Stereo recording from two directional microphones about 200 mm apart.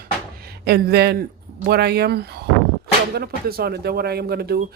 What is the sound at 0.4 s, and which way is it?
Speech, 55° right (ahead or behind).